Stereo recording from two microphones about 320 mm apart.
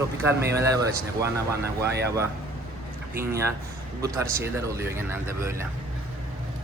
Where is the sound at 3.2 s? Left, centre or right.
Centre.